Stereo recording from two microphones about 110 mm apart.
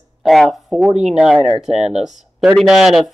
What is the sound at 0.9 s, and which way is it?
Speech, 90° right.